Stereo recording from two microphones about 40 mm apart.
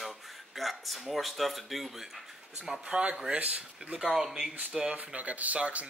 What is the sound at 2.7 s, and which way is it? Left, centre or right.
Speech, right.